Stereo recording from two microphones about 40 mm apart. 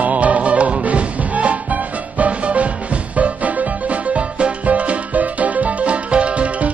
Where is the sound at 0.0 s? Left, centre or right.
Right.